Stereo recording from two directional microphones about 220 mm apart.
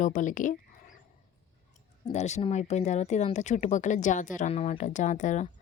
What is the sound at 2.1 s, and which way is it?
Speech, 30° left (ahead or behind).